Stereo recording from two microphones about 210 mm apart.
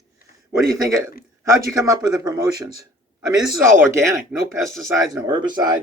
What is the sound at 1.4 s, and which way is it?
Speech, 15° right (ahead or behind).